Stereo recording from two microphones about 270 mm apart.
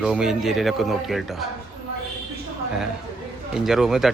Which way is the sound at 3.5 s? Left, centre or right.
Centre.